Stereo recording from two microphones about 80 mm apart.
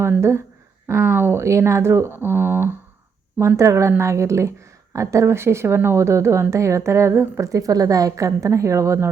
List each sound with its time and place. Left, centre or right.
0.2 s speech: right
3.6 s speech: right
7.4 s speech: right